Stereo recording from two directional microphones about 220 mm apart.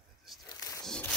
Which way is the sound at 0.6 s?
15° left (ahead or behind).